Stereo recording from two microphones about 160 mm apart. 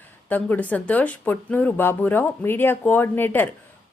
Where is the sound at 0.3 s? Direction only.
10° left (ahead or behind).